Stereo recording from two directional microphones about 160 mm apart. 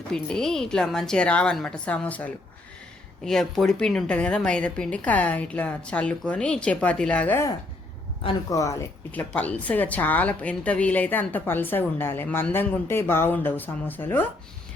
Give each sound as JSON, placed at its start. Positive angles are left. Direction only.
{"t": 0.1, "sound": "a woman's voice", "side_deg": 5}
{"t": 9.1, "sound": "a woman's voice", "side_deg": 10}